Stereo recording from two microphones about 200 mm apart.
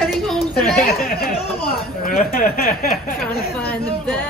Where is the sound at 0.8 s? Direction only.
50° left (ahead or behind).